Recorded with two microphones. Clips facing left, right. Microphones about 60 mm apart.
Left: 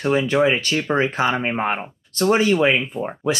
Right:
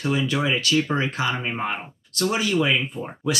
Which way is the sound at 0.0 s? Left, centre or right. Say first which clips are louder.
Left 6 dB; left.